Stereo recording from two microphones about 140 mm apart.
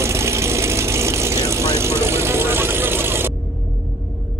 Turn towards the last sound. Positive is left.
turn(degrees=-15)  # may be behind; listen again after turning